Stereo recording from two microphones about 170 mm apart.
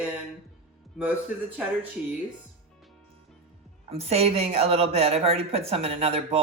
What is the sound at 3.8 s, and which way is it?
Speech, 35° right (ahead or behind).